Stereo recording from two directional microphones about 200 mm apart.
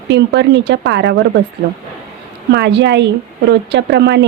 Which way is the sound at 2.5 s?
60° right (ahead or behind).